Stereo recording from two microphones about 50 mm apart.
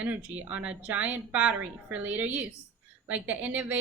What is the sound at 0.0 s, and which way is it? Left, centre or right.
A woman's voice, right.